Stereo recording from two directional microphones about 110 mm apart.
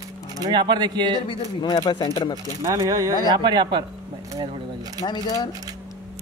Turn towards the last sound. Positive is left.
turn(degrees=40)  # may be behind; listen again after turning